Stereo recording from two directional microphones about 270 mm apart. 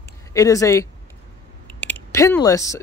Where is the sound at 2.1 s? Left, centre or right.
Centre.